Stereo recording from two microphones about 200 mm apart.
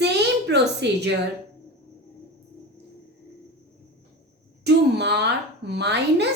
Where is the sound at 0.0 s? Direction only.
55° right (ahead or behind).